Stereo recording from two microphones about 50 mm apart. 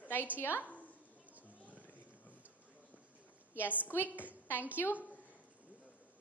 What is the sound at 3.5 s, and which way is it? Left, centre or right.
Speech, left.